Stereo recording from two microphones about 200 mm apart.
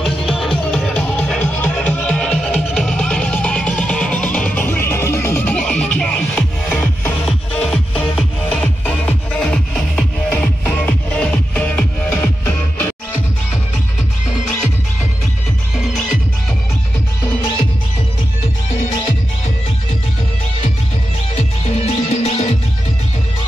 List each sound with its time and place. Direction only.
0.3 s music: centre (ahead or behind)
15.7 s music: centre (ahead or behind)
21.4 s music: 30° left (ahead or behind)